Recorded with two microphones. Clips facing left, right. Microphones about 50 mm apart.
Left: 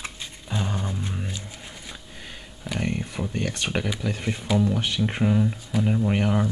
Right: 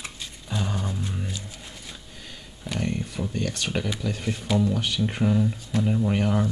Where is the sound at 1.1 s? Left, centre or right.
Centre.